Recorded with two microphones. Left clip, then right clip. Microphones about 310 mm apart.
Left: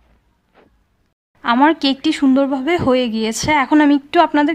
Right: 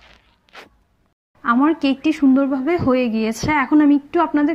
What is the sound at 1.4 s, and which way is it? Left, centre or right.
Speech, left.